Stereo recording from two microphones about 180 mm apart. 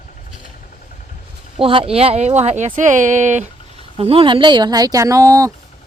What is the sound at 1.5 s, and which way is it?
Speech, 30° right (ahead or behind).